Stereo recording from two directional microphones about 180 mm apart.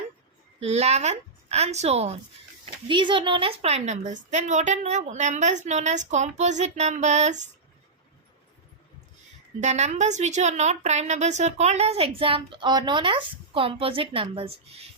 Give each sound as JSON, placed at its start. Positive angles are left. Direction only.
{"t": 0.6, "sound": "a woman's voice", "side_deg": -35}
{"t": 2.8, "sound": "a woman's voice", "side_deg": -25}
{"t": 9.6, "sound": "a woman's voice", "side_deg": -40}